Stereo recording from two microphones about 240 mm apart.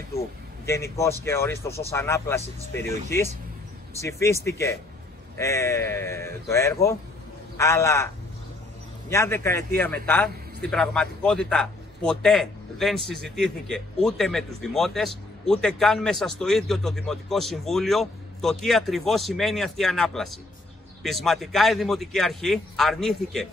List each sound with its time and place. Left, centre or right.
0.7 s a man's voice: centre
4.0 s a man's voice: centre
9.1 s a man's voice: centre